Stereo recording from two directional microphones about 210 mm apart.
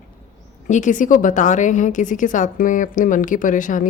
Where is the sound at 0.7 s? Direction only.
35° left (ahead or behind).